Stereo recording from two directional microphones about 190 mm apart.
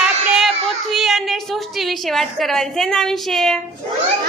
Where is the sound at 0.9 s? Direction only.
Centre (ahead or behind).